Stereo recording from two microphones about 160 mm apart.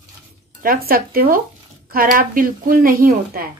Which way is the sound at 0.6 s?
65° right (ahead or behind).